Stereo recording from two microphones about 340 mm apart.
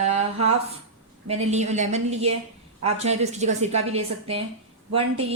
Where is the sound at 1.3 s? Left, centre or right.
Centre.